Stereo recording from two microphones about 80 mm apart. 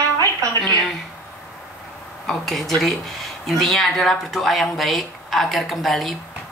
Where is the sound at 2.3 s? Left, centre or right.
Centre.